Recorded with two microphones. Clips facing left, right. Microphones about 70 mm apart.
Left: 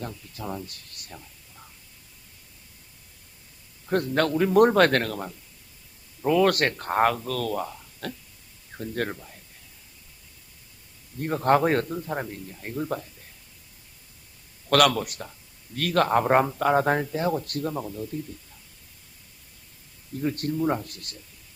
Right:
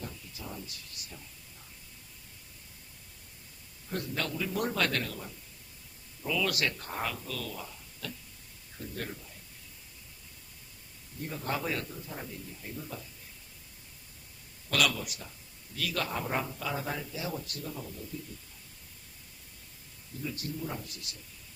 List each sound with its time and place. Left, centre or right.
0.0 s speech: left
3.8 s speech: left
11.2 s speech: left
14.7 s speech: left
20.2 s speech: left